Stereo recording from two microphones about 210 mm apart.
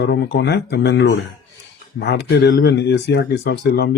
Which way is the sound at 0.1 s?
50° left (ahead or behind).